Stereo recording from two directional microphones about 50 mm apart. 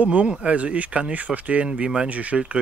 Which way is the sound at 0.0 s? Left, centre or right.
Right.